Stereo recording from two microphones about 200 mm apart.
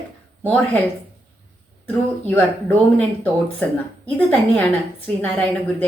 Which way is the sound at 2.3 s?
5° left (ahead or behind).